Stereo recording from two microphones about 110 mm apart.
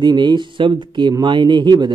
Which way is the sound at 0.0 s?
40° right (ahead or behind).